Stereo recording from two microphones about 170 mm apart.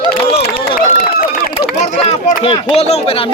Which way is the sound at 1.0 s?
60° left (ahead or behind).